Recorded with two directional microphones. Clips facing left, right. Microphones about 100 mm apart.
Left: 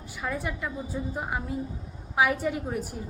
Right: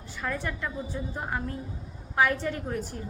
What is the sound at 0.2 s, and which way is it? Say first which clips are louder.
A woman's voice: even; 10° left (ahead or behind).